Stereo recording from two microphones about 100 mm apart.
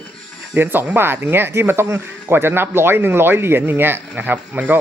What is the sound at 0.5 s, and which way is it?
Speech, 20° right (ahead or behind).